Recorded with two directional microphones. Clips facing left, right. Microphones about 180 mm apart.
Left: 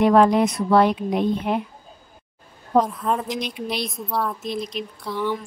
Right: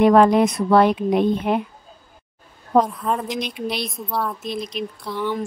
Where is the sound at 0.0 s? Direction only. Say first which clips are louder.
Right 2 dB; 60° right (ahead or behind).